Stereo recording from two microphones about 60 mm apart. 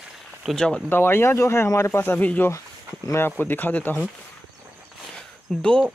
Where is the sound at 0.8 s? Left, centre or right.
Left.